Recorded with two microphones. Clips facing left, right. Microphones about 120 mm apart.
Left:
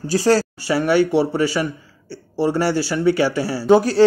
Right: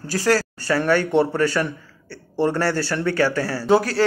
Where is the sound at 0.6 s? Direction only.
10° left (ahead or behind).